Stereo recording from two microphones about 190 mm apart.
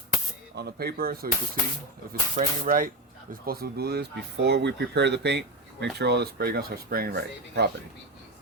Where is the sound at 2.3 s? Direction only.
45° right (ahead or behind).